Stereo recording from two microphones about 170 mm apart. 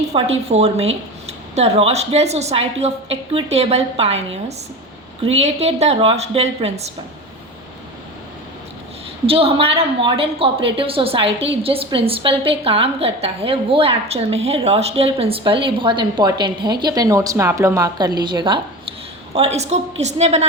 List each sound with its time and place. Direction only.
0.1 s a woman's voice: 40° right (ahead or behind)
9.2 s a woman's voice: 35° right (ahead or behind)
19.3 s a woman's voice: 40° right (ahead or behind)